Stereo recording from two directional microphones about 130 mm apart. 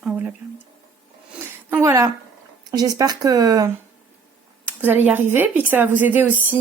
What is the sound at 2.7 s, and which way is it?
Speech, 30° right (ahead or behind).